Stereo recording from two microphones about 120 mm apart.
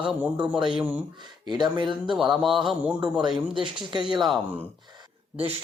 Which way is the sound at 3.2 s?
40° right (ahead or behind).